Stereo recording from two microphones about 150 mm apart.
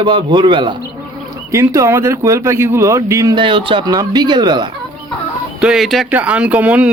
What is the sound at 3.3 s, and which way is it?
Speech, 35° right (ahead or behind).